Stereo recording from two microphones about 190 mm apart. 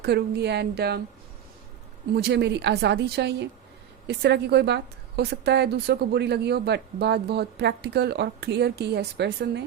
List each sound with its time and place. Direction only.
0.0 s a woman's voice: 60° right (ahead or behind)
2.1 s a woman's voice: 60° right (ahead or behind)